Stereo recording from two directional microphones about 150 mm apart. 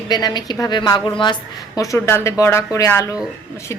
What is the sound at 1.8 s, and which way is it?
A woman's voice, 20° left (ahead or behind).